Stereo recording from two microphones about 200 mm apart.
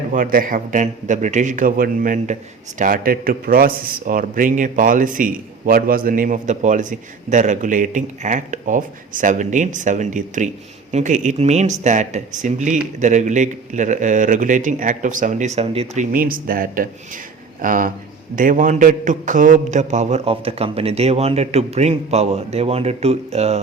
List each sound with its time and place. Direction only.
0.1 s a man's voice: 40° right (ahead or behind)
16.1 s a man's voice: 45° right (ahead or behind)